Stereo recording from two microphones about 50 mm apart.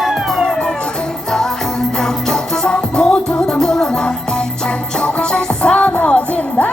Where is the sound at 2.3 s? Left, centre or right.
Centre.